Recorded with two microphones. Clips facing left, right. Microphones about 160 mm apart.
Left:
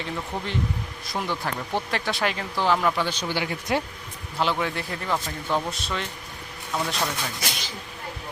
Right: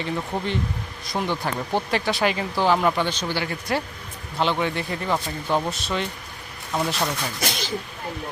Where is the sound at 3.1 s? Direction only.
10° left (ahead or behind).